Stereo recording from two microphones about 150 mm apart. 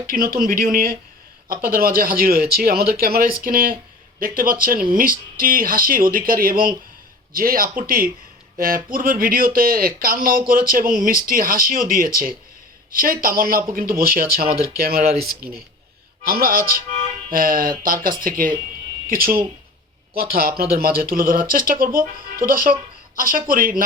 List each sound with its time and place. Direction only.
0.3 s speech: 70° right (ahead or behind)
14.8 s speech: 90° right
16.2 s speech: 80° right